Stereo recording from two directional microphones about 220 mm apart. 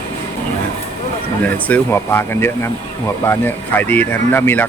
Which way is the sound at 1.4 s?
5° left (ahead or behind).